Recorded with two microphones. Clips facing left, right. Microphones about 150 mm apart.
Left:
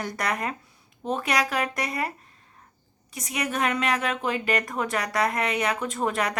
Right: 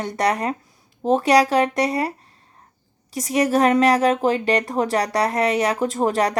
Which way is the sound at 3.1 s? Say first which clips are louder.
Right 10 dB; 40° right (ahead or behind).